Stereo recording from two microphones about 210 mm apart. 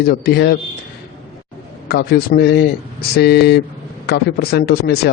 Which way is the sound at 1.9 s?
50° left (ahead or behind).